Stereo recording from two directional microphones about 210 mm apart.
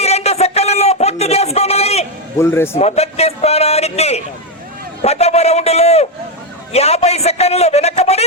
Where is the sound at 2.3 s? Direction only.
10° left (ahead or behind).